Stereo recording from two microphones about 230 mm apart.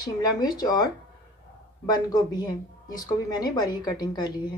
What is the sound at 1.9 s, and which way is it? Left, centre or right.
A woman's voice, centre.